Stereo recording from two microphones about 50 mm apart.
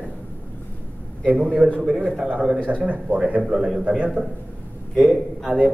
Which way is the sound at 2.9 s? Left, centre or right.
Right.